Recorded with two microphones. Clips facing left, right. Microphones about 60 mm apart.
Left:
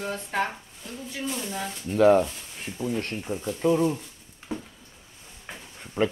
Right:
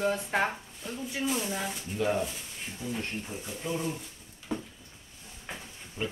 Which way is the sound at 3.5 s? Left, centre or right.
Left.